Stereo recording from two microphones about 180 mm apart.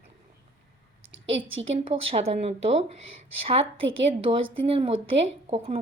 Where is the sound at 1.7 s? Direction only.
35° right (ahead or behind).